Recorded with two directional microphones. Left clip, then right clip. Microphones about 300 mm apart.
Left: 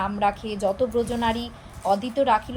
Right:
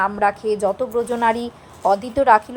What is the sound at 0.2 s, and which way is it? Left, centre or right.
A woman's voice, centre.